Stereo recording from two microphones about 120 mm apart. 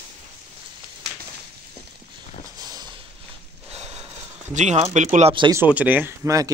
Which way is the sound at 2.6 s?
35° right (ahead or behind).